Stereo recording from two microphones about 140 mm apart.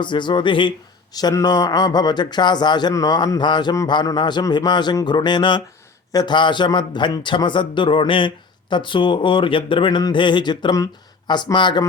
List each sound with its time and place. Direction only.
0.0 s speech: 35° left (ahead or behind)